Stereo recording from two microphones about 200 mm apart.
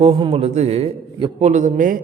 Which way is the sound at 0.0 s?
30° right (ahead or behind).